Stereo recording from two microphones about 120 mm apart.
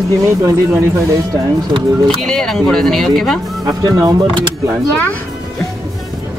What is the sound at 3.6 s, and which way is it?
Speech, 30° right (ahead or behind).